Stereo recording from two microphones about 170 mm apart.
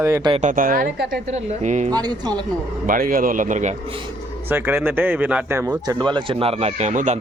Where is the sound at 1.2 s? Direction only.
45° right (ahead or behind).